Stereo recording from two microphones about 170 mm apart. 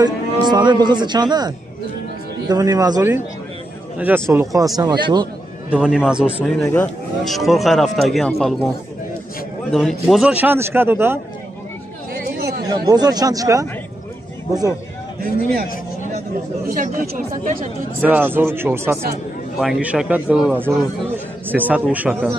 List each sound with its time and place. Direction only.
0.0 s a man's voice: 25° right (ahead or behind)
5.7 s speech: 5° right (ahead or behind)
6.4 s speech: 5° left (ahead or behind)
9.7 s a man's voice: centre (ahead or behind)
12.6 s speech: 25° right (ahead or behind)
16.7 s speech: 50° right (ahead or behind)
18.0 s a man's voice: 10° right (ahead or behind)